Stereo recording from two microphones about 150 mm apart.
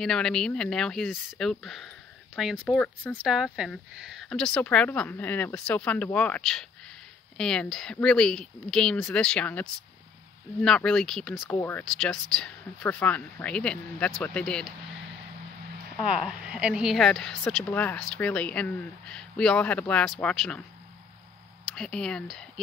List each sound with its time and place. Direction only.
0.0 s a woman's voice: 5° left (ahead or behind)
3.5 s a woman's voice: centre (ahead or behind)
11.5 s a woman's voice: 15° left (ahead or behind)
11.8 s a woman's voice: 5° left (ahead or behind)
16.1 s a woman's voice: 5° right (ahead or behind)
21.7 s a woman's voice: 5° left (ahead or behind)